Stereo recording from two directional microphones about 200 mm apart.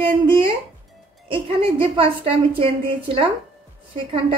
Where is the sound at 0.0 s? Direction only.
25° right (ahead or behind).